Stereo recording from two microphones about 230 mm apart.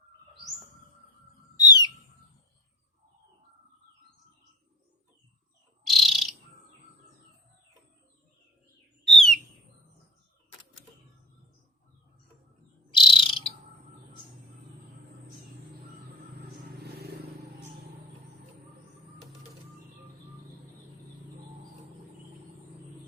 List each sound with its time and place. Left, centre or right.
1.6 s owl: centre
5.8 s bird: centre
9.0 s bird: centre
12.9 s bird: left
16.8 s vehicle: right